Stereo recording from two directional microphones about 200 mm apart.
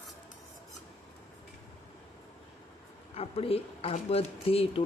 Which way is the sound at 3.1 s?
30° left (ahead or behind).